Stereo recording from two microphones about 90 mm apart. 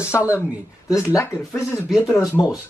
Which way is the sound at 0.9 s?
25° left (ahead or behind).